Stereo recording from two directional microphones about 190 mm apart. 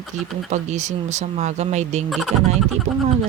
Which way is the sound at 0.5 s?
40° right (ahead or behind).